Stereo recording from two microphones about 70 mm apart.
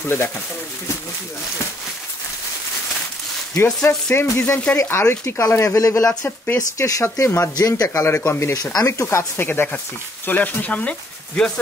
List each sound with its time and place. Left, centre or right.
3.5 s speech: left
6.2 s speech: left
6.8 s speech: left
7.2 s speech: left
7.5 s speech: left
8.3 s speech: left
8.7 s speech: left
9.4 s speech: left